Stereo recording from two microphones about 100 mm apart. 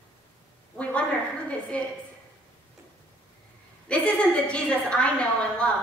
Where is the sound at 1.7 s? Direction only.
10° left (ahead or behind).